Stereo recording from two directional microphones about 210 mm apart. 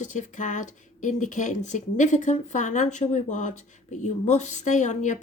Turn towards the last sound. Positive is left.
turn(degrees=35)  # may be behind; listen again after turning